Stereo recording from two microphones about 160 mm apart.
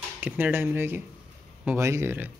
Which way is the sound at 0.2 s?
10° right (ahead or behind).